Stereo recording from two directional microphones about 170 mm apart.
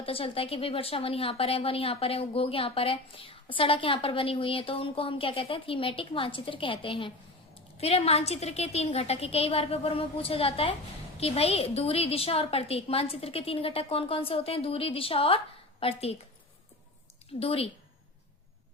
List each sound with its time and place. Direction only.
0.0 s speech: 35° left (ahead or behind)
17.4 s speech: 35° left (ahead or behind)